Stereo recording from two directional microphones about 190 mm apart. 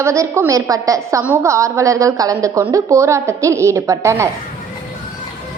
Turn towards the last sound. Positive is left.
turn(degrees=-15)  # may be behind; listen again after turning